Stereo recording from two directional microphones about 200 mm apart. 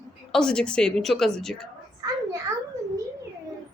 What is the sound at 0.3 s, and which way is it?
A woman's voice, 5° left (ahead or behind).